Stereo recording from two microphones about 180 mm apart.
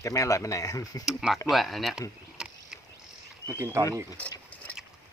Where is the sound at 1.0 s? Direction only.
Centre (ahead or behind).